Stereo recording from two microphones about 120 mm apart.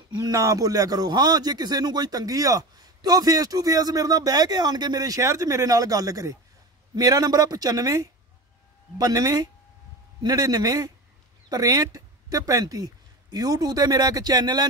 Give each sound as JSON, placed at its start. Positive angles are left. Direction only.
{"t": 0.2, "sound": "a man's voice", "side_deg": -30}